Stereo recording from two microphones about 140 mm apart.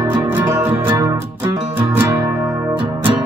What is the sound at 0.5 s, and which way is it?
Music, 15° right (ahead or behind).